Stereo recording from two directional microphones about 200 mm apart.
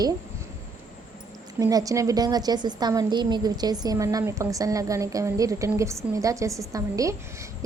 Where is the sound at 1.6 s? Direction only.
15° right (ahead or behind).